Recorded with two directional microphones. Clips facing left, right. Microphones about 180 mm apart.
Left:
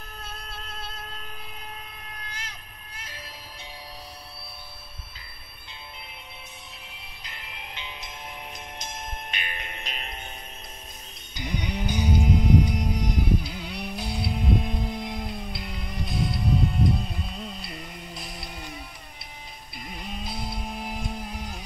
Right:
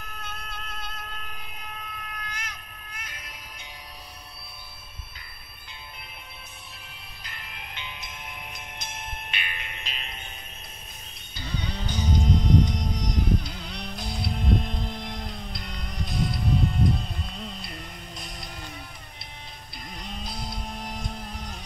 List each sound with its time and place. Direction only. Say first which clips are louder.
0.2 s train: even; 30° left (ahead or behind)
2.2 s music: right 2 dB; 30° left (ahead or behind)
7.3 s music: left 1 dB; 25° left (ahead or behind); by 10.2 s 45° left (ahead or behind)
11.3 s music: left 3 dB; 15° left (ahead or behind)
19.8 s music: left 2 dB; 5° left (ahead or behind)